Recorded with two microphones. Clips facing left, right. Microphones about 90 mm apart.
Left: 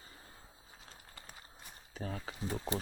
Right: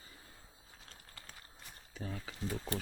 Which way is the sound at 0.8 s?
15° left (ahead or behind).